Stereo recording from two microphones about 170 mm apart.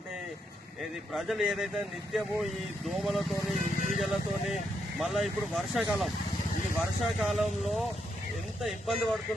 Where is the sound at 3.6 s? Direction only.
50° left (ahead or behind).